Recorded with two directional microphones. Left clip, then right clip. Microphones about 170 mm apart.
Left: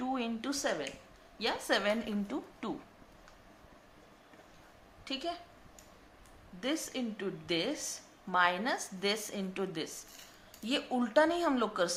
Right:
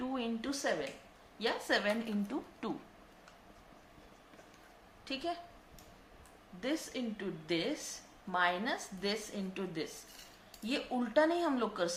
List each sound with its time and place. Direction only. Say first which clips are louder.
0.0 s a sound: left 2 dB; 25° left (ahead or behind)
1.4 s a woman's voice: left 1 dB; 20° left (ahead or behind)
2.2 s a woman's voice: left 1 dB; 10° left (ahead or behind)
5.0 s a woman's voice: left 1 dB; 20° left (ahead or behind)
6.6 s a woman's voice: left 2 dB; 25° left (ahead or behind)